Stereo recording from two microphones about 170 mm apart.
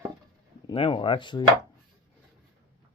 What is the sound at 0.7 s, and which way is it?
Chopping, 30° left (ahead or behind).